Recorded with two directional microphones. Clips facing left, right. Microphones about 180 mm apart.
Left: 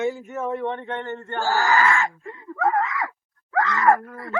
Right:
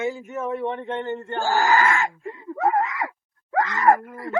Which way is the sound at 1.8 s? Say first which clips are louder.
Even; 40° right (ahead or behind).